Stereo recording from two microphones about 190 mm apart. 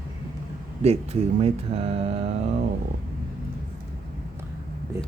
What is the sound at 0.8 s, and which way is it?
Speech, 35° right (ahead or behind).